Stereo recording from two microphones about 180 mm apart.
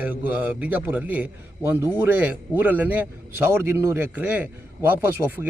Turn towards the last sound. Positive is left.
turn(degrees=-10)  # may be behind; listen again after turning